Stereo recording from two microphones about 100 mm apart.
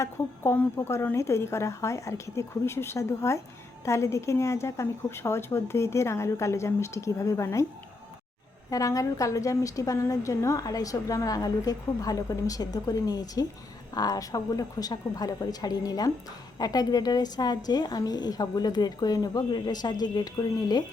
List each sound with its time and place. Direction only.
0.5 s speech: 15° left (ahead or behind)
0.9 s speech: 25° left (ahead or behind)
8.7 s a woman's voice: 35° left (ahead or behind)